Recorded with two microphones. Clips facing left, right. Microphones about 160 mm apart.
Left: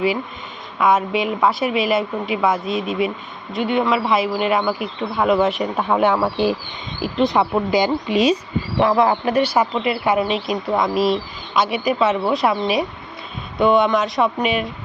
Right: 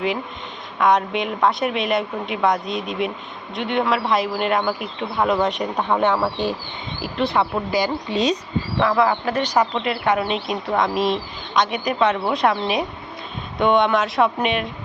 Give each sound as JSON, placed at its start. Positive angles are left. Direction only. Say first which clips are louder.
{"t": 0.8, "sound": "speech", "louder": "left 1 dB", "side_deg": 5}
{"t": 8.8, "sound": "speech", "louder": "left 3 dB", "side_deg": 20}